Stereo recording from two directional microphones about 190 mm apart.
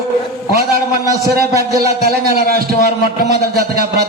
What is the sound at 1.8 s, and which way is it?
A man's voice, 55° right (ahead or behind).